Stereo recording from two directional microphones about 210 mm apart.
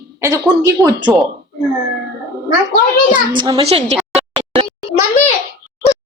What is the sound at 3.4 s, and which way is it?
Speech, 20° right (ahead or behind).